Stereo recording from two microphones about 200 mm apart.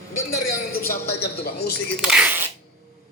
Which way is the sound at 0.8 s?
50° left (ahead or behind).